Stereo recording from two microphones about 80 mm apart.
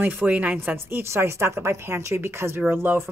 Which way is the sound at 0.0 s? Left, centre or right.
Right.